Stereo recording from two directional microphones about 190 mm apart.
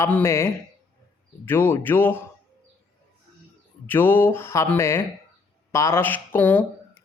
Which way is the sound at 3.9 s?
10° left (ahead or behind).